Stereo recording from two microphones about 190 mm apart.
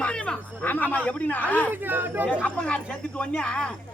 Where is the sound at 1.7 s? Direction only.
10° right (ahead or behind).